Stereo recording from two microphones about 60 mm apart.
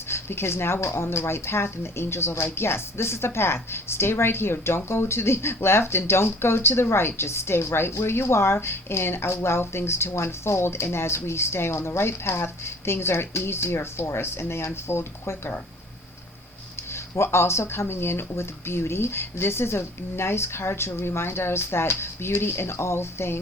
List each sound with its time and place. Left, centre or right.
0.1 s a woman's voice: left
16.9 s a woman's voice: left